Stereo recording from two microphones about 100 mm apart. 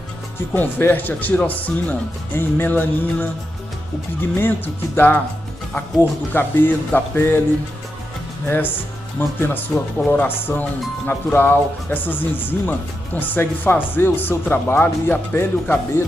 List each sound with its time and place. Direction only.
0.6 s speech: 20° left (ahead or behind)
4.4 s speech: 20° left (ahead or behind)
8.5 s speech: 20° left (ahead or behind)